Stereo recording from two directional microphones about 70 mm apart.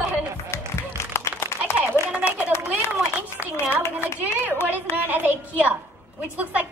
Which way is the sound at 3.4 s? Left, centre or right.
Right.